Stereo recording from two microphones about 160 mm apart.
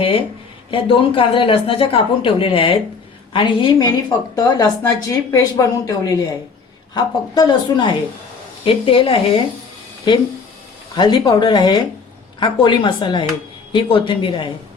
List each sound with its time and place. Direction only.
0.0 s a woman's voice: 35° left (ahead or behind)
10.9 s a woman's voice: 25° left (ahead or behind)